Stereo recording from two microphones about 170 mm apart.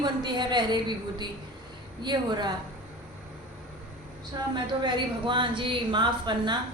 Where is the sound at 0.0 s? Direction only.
25° right (ahead or behind).